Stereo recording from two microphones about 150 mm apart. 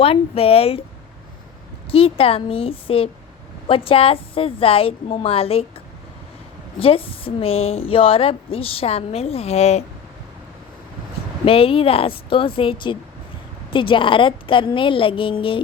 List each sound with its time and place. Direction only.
0.0 s a woman's voice: 40° left (ahead or behind)
1.9 s a woman's voice: 40° left (ahead or behind)
6.7 s a woman's voice: 40° left (ahead or behind)
11.4 s a woman's voice: 40° left (ahead or behind)